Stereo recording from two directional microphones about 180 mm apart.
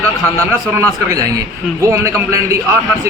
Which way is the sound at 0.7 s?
15° right (ahead or behind).